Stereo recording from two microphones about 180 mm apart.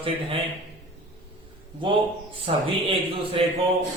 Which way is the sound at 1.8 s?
30° right (ahead or behind).